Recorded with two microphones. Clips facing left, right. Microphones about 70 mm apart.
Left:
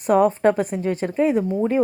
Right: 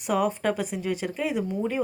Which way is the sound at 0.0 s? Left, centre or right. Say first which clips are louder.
Left 8 dB; left.